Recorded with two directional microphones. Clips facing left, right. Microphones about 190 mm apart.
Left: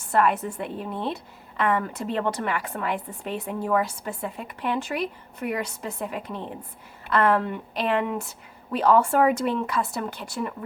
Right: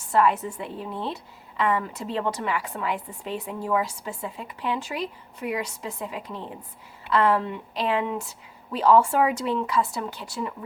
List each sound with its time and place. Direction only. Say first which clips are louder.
0.1 s a woman's voice: even; 55° left (ahead or behind)